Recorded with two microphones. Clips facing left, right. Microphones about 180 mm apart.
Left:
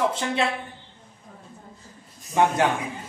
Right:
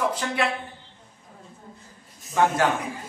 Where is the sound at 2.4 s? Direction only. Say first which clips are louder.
Left 1 dB; 20° left (ahead or behind).